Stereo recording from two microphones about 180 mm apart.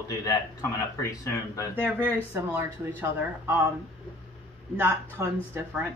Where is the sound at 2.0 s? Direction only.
10° right (ahead or behind).